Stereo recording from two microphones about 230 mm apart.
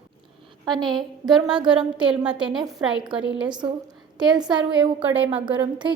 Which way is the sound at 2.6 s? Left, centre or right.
Centre.